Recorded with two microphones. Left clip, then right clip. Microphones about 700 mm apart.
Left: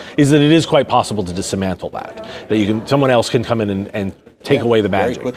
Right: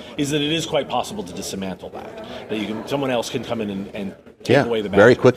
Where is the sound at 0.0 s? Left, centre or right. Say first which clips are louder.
Left 10 dB; left.